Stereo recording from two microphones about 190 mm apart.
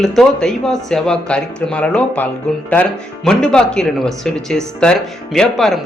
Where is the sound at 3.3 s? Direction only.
5° left (ahead or behind).